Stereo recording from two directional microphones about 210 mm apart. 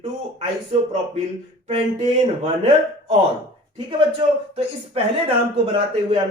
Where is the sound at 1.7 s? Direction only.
25° right (ahead or behind).